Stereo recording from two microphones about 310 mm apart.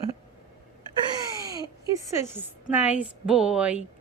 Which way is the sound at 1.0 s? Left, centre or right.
Centre.